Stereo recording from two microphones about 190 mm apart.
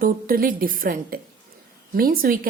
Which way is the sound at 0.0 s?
50° right (ahead or behind).